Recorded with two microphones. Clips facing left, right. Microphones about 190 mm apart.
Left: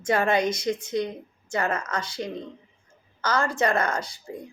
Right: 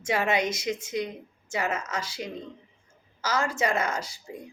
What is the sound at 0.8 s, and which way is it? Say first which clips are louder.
Speech: left 3 dB; 30° left (ahead or behind).